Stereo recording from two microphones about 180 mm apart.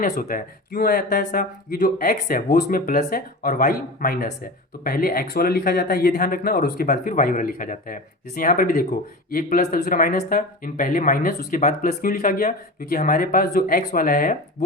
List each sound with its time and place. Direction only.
0.0 s speech: 50° left (ahead or behind)